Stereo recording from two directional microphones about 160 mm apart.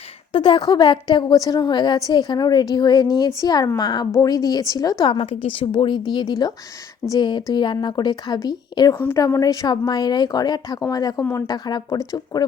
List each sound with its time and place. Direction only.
0.3 s speech: 30° left (ahead or behind)